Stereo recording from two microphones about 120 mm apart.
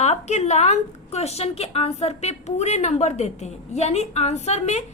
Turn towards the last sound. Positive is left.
turn(degrees=70)  # may be behind; listen again after turning